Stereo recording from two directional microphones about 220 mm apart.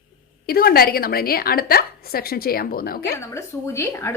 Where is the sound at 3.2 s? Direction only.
10° left (ahead or behind).